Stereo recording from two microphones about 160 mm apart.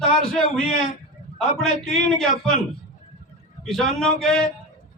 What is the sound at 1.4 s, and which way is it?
A man's voice, 5° left (ahead or behind).